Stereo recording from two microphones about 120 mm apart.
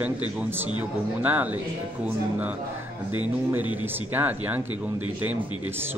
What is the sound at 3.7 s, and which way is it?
Speech, 15° right (ahead or behind).